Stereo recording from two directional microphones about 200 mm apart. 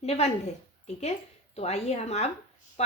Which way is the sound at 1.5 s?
35° left (ahead or behind).